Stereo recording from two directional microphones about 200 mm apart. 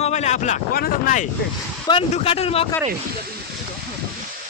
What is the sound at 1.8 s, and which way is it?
Speech, 25° left (ahead or behind).